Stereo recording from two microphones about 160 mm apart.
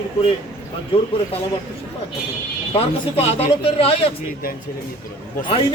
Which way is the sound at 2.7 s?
40° left (ahead or behind).